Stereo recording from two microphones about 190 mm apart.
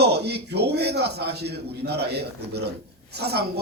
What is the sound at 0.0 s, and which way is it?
A man's voice, 60° right (ahead or behind).